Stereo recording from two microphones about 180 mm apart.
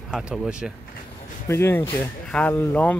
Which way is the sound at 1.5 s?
15° left (ahead or behind).